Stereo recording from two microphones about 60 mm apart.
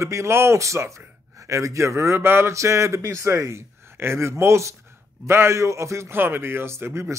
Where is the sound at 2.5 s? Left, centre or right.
Right.